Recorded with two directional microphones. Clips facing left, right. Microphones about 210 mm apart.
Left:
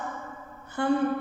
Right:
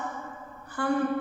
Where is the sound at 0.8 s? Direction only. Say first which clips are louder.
Left 3 dB; 25° left (ahead or behind).